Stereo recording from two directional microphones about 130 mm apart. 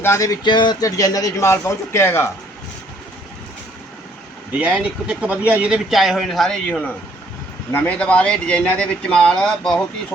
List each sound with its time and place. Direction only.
0.0 s a man's voice: 20° left (ahead or behind)
4.5 s speech: 10° right (ahead or behind); by 9.7 s 5° left (ahead or behind)